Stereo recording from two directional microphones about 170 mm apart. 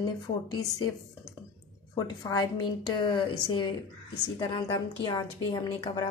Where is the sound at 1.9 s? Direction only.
20° left (ahead or behind).